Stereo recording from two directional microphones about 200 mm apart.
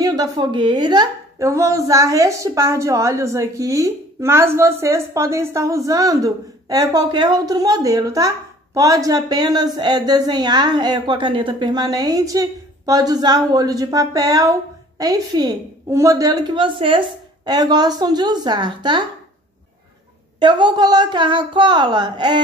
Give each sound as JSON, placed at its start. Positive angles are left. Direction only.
{"t": 0.0, "sound": "a woman's voice", "side_deg": -20}
{"t": 20.3, "sound": "speech", "side_deg": -20}